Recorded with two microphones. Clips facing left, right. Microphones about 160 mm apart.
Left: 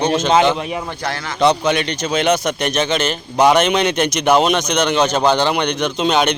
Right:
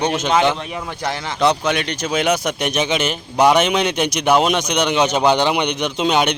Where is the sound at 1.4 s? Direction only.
Centre (ahead or behind).